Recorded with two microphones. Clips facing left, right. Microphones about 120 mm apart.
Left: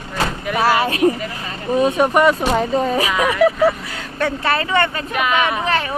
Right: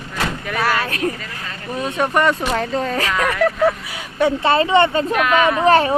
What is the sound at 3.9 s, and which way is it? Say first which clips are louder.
Speech: right 4 dB; 15° right (ahead or behind).